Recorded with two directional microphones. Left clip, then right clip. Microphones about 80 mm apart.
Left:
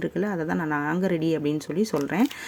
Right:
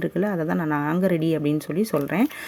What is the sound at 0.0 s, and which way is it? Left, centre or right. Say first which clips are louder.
Speech: right 3 dB; right.